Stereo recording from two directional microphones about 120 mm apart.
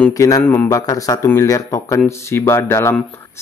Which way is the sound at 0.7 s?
30° left (ahead or behind).